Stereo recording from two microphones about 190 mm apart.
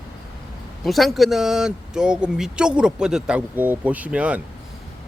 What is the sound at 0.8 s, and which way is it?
Speech, centre (ahead or behind).